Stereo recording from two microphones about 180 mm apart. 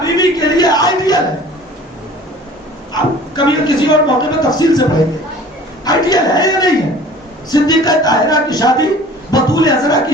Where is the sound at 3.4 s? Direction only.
25° left (ahead or behind).